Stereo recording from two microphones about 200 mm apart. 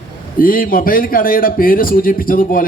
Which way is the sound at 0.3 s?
45° left (ahead or behind).